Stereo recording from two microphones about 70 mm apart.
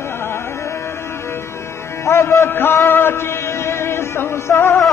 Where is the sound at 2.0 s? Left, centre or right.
Left.